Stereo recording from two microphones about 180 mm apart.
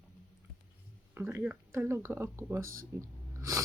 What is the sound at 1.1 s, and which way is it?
Speech, 15° right (ahead or behind).